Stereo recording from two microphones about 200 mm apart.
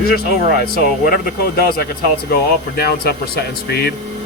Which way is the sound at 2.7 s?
50° left (ahead or behind).